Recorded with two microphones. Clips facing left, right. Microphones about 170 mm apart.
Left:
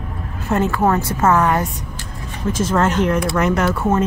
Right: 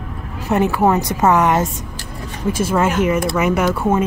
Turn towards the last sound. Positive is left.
turn(degrees=-10)  # may be behind; listen again after turning